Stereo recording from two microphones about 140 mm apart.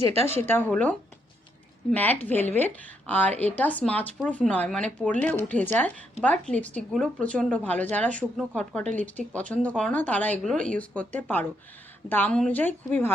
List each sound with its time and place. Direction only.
0.3 s a woman's voice: 15° left (ahead or behind)